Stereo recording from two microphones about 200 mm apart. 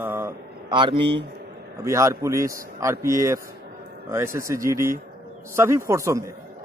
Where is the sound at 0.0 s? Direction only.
10° right (ahead or behind).